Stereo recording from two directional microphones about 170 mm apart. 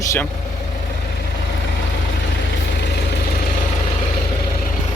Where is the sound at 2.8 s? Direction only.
80° left.